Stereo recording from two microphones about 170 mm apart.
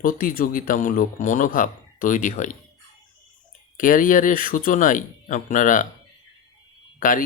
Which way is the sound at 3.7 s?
50° left (ahead or behind).